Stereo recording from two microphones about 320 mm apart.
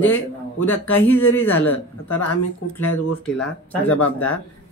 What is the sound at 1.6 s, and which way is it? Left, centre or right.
Speech, left.